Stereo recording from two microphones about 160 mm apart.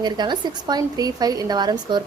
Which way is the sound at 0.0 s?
25° right (ahead or behind).